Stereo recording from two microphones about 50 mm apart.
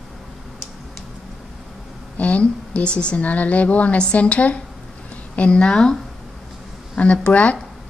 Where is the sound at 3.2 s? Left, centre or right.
Left; by 6.0 s centre.